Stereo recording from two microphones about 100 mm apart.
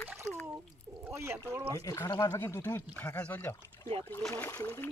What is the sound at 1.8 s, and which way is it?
Speech, 35° left (ahead or behind).